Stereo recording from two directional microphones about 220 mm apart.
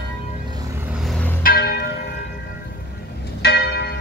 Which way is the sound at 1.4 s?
45° left (ahead or behind).